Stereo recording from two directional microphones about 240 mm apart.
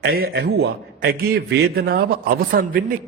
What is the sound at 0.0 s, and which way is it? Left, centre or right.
A man's voice, right.